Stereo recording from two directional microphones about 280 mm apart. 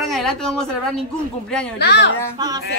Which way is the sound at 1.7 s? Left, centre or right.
Left.